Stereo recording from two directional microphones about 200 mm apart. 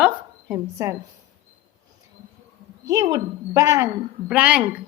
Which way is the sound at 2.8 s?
15° right (ahead or behind).